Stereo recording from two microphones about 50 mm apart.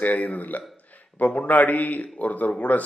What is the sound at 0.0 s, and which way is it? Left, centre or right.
Speech, left.